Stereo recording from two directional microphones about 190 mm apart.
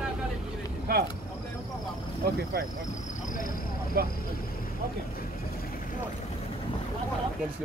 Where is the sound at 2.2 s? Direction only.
50° right (ahead or behind).